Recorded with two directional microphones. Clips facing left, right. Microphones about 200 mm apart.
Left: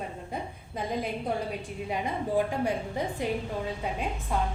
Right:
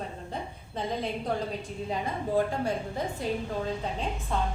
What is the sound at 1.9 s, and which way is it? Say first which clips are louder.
A woman's voice: even; 15° left (ahead or behind).